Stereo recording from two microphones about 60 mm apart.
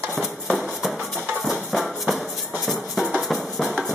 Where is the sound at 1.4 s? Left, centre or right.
Centre.